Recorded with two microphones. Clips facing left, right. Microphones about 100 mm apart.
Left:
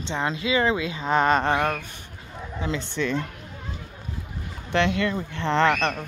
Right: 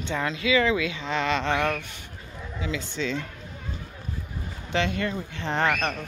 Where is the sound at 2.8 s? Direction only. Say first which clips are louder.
Left 3 dB; 60° left (ahead or behind).